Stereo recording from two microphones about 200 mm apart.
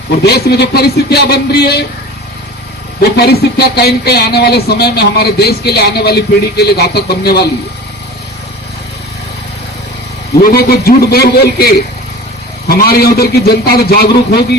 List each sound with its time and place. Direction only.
0.2 s speech: 55° left (ahead or behind)
3.0 s speech: 55° left (ahead or behind)
10.5 s speech: 50° left (ahead or behind)